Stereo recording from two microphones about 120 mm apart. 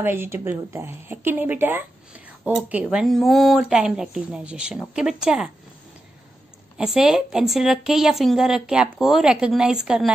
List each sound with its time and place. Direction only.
0.0 s speech: 20° right (ahead or behind)
6.8 s a woman's voice: 5° right (ahead or behind)